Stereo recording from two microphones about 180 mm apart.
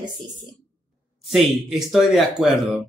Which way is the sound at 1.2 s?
Centre (ahead or behind).